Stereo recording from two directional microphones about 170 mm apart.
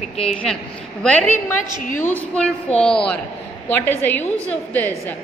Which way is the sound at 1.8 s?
50° left (ahead or behind).